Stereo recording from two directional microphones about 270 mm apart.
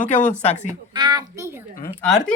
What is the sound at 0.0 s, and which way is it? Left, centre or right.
Speech, left.